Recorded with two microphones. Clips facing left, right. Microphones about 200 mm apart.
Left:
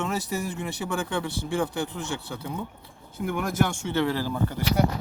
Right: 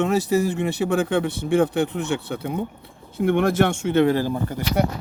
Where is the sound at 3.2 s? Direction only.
80° right.